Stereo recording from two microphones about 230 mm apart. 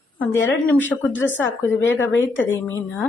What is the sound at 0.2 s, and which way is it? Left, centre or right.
A woman's voice, centre.